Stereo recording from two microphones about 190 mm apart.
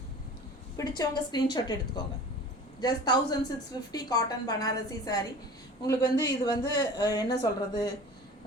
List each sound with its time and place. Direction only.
0.8 s a woman's voice: 20° left (ahead or behind)
2.8 s a woman's voice: 20° left (ahead or behind)